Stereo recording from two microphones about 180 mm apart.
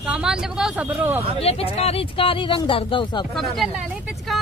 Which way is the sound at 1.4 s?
35° left (ahead or behind).